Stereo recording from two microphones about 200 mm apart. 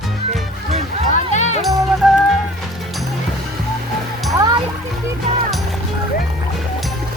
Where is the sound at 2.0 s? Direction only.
Centre (ahead or behind).